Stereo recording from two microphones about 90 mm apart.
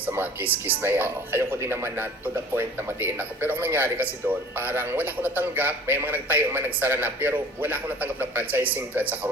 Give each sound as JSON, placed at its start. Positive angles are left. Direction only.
{"t": 0.1, "sound": "speech", "side_deg": -25}